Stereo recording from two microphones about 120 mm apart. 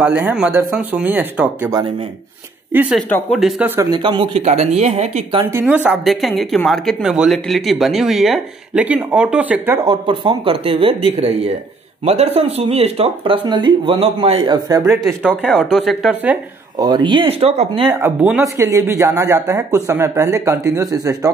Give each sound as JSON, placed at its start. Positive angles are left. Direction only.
{"t": 0.0, "sound": "speech", "side_deg": -10}
{"t": 2.7, "sound": "speech", "side_deg": -15}
{"t": 3.3, "sound": "speech", "side_deg": 0}
{"t": 3.6, "sound": "speech", "side_deg": -20}
{"t": 3.9, "sound": "speech", "side_deg": -40}
{"t": 4.4, "sound": "speech", "side_deg": -65}
{"t": 5.5, "sound": "speech", "side_deg": -15}
{"t": 6.0, "sound": "speech", "side_deg": 0}
{"t": 9.8, "sound": "speech", "side_deg": -45}
{"t": 14.5, "sound": "speech", "side_deg": -30}
{"t": 15.4, "sound": "speech", "side_deg": -5}
{"t": 16.7, "sound": "speech", "side_deg": -40}
{"t": 18.4, "sound": "speech", "side_deg": -25}